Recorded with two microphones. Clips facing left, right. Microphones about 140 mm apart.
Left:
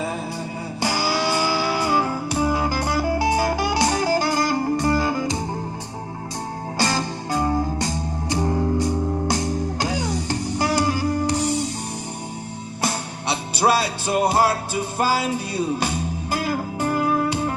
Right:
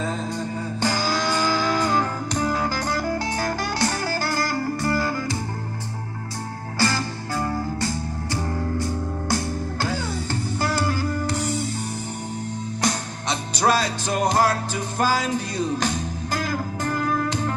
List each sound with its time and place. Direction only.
0.8 s music: 10° left (ahead or behind)
6.7 s music: 20° left (ahead or behind)
12.8 s music: 10° left (ahead or behind)